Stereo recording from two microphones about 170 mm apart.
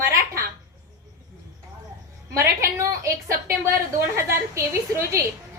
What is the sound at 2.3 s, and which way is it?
A woman's voice, 15° right (ahead or behind).